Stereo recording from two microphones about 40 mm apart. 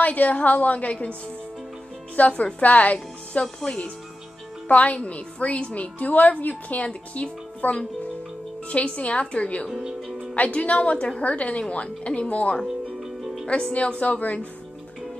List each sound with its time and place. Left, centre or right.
0.0 s a woman's voice: left
2.1 s a woman's voice: left
3.6 s a woman's voice: left